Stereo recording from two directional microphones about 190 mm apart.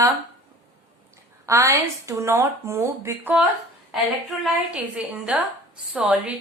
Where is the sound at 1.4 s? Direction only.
15° right (ahead or behind).